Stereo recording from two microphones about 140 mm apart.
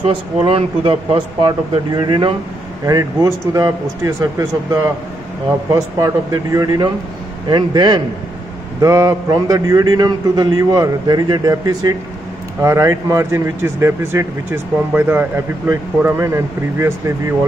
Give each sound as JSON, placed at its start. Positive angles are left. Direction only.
{"t": 0.0, "sound": "speech", "side_deg": -40}
{"t": 2.8, "sound": "speech", "side_deg": -25}